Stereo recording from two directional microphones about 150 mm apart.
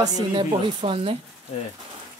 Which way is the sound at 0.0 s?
30° right (ahead or behind).